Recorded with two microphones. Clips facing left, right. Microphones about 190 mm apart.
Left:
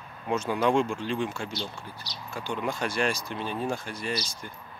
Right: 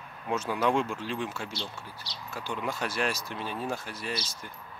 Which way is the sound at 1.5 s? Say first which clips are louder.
Left 3 dB; 30° right (ahead or behind).